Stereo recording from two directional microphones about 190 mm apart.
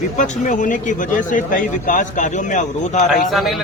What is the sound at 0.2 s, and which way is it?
Speech, 40° left (ahead or behind).